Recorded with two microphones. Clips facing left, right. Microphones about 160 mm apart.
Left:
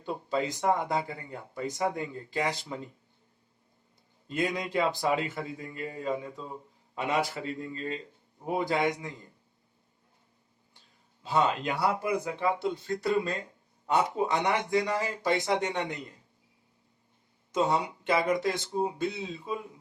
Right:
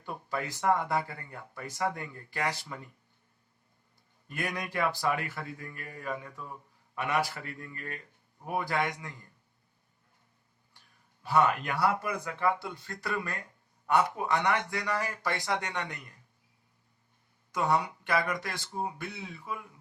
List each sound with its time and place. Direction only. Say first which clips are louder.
0.0 s speech: left 5 dB; 20° left (ahead or behind)
4.3 s speech: left 5 dB; 20° left (ahead or behind)
10.8 s speech: even; 20° left (ahead or behind)
17.5 s speech: left 2 dB; 20° left (ahead or behind)